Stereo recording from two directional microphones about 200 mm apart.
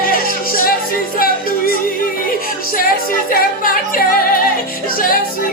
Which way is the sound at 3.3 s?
45° left (ahead or behind).